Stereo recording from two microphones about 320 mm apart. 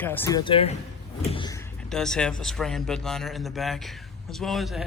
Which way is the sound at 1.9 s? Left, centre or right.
Centre.